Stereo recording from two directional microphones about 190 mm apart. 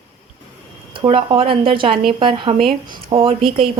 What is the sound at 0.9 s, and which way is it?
A woman's voice, 25° right (ahead or behind).